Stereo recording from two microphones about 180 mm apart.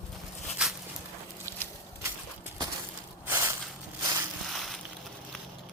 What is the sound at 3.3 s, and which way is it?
Crushing, 15° right (ahead or behind).